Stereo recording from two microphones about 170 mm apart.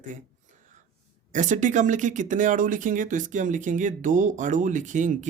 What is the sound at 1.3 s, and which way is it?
Speech, 50° right (ahead or behind).